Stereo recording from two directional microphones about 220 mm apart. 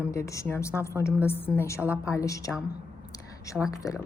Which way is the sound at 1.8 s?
5° right (ahead or behind).